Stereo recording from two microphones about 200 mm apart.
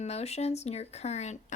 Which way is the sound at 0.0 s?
30° left (ahead or behind).